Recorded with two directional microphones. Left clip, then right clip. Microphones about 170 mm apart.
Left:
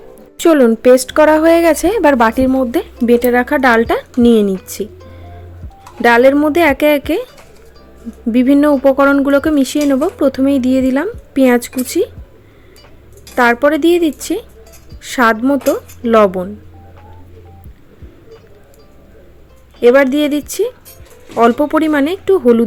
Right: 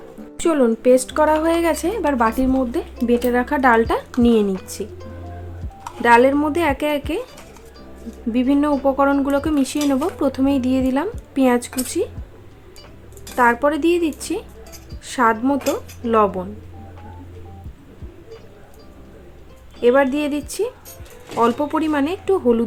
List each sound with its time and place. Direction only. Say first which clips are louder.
0.3 s a woman's voice: left 8 dB; 40° left (ahead or behind)
6.0 s speech: left 5 dB; 35° left (ahead or behind)
8.3 s a woman's voice: left 8 dB; 35° left (ahead or behind)
13.3 s speech: left 5 dB; 35° left (ahead or behind)
19.8 s speech: left 6 dB; 35° left (ahead or behind)